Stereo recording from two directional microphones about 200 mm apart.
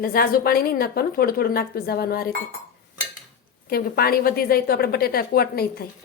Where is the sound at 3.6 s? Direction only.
50° left (ahead or behind).